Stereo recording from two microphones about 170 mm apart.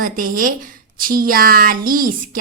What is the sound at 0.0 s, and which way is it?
A woman's voice, 55° right (ahead or behind).